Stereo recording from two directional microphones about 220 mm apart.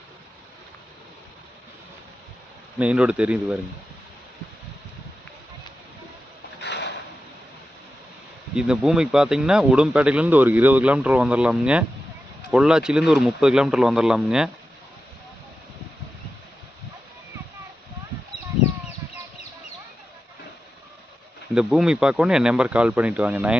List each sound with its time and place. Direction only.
2.7 s speech: 5° right (ahead or behind)
6.6 s a sound: 50° left (ahead or behind)
8.5 s speech: 5° right (ahead or behind)
21.5 s speech: 5° right (ahead or behind)